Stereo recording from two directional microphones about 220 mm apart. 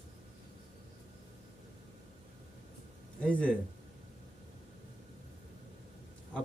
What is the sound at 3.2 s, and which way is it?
Speech, 5° left (ahead or behind).